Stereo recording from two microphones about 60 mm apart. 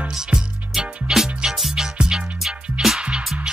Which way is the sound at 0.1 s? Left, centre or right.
Centre.